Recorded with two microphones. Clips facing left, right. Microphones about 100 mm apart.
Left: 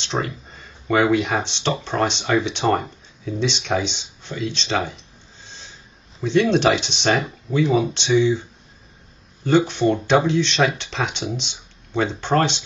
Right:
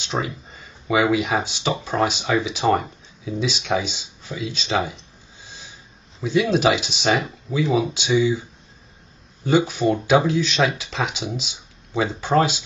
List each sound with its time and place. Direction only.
0.0 s speech: 5° right (ahead or behind)